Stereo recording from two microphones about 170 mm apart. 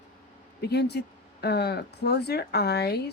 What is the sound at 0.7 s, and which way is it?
Speech, 75° left (ahead or behind).